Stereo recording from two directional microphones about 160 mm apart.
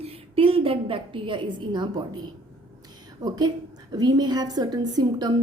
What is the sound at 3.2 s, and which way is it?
A woman's voice, 25° right (ahead or behind).